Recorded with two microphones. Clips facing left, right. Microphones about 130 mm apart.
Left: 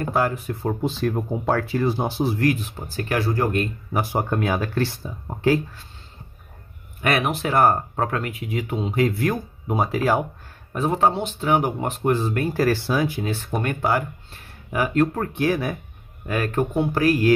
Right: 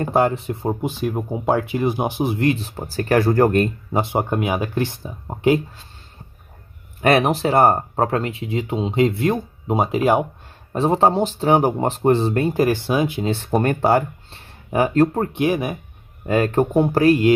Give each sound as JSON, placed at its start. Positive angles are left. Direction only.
{"t": 0.0, "sound": "speech", "side_deg": -25}
{"t": 2.7, "sound": "speech", "side_deg": -45}
{"t": 3.9, "sound": "speech", "side_deg": -25}
{"t": 7.0, "sound": "speech", "side_deg": -35}
{"t": 15.3, "sound": "speech", "side_deg": -20}
{"t": 17.0, "sound": "speech", "side_deg": -25}